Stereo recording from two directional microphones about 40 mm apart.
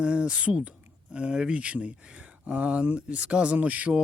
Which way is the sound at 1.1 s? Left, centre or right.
Right.